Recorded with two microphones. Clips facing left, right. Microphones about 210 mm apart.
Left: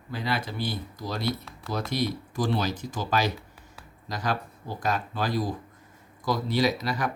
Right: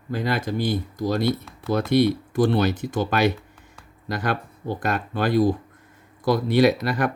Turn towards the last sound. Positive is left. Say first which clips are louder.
# right 7 dB
turn(degrees=-60)  # may be behind; listen again after turning